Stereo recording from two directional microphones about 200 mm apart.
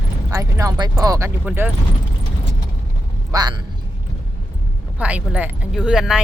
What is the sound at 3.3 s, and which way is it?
Speech, 20° right (ahead or behind).